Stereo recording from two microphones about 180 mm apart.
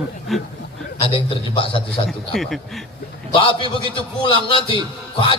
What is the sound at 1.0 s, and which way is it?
Speech, 30° left (ahead or behind).